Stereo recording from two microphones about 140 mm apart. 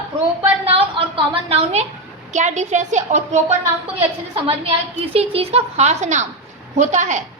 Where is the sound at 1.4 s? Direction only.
50° right (ahead or behind).